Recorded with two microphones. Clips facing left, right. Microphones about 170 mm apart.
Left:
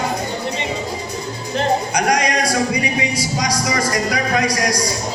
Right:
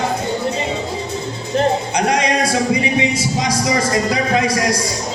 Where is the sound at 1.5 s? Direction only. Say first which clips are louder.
Right 2 dB; 25° right (ahead or behind).